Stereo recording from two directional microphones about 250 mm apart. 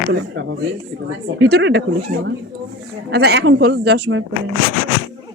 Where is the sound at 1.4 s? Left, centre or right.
Right.